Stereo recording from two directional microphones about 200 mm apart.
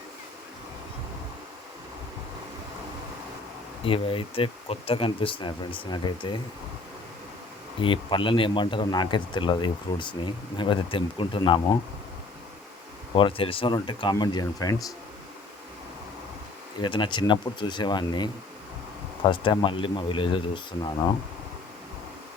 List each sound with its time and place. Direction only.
3.8 s a man's voice: 25° left (ahead or behind)
7.8 s a man's voice: 25° left (ahead or behind)
13.1 s a man's voice: 25° left (ahead or behind)
16.8 s a man's voice: 25° left (ahead or behind)